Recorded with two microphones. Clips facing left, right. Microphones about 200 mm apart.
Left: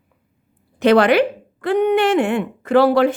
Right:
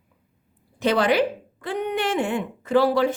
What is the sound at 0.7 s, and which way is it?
A woman's voice, 65° left (ahead or behind).